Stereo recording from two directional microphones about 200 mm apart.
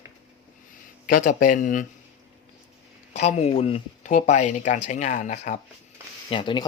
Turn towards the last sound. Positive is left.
turn(degrees=25)  # may be behind; listen again after turning